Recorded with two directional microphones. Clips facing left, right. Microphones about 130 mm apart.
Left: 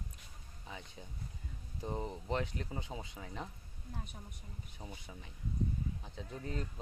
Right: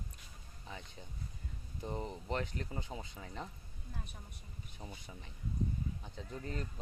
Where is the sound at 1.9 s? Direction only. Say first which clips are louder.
Left 1 dB; 10° left (ahead or behind).